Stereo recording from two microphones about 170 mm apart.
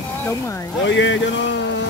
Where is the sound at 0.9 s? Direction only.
90° left.